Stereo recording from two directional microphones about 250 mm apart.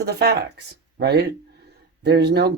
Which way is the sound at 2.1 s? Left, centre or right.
Right.